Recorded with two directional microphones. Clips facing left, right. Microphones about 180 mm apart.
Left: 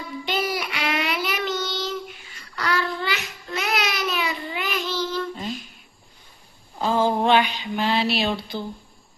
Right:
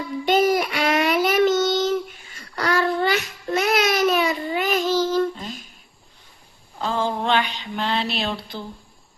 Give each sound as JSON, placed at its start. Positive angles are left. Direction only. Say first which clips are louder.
{"t": 0.3, "sound": "child singing", "louder": "right 9 dB", "side_deg": -45}
{"t": 6.7, "sound": "a sound", "louder": "left 3 dB", "side_deg": 10}
{"t": 7.1, "sound": "mantra", "louder": "left 3 dB", "side_deg": 15}